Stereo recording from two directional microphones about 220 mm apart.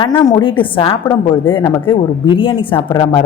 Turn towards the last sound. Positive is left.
turn(degrees=20)  # may be behind; listen again after turning